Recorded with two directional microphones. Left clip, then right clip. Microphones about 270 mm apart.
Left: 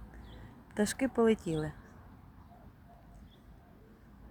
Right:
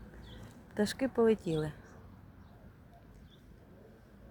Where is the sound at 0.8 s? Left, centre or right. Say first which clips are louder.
Even; centre.